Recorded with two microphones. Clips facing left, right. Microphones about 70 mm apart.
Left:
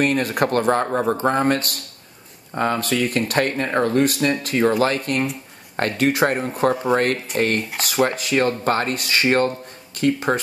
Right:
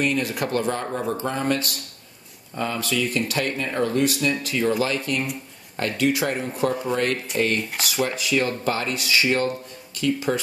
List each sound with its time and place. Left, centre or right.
0.0 s speech: left